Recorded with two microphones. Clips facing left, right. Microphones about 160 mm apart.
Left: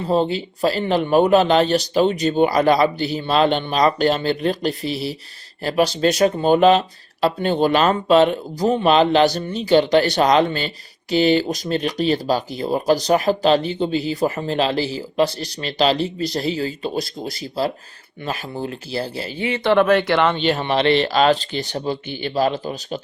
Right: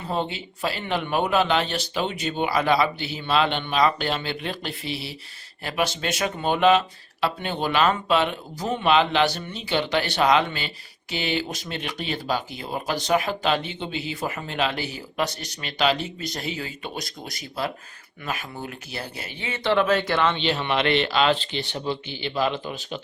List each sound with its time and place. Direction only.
0.0 s speech: 35° left (ahead or behind)
19.6 s speech: 55° left (ahead or behind)
20.3 s speech: 45° left (ahead or behind)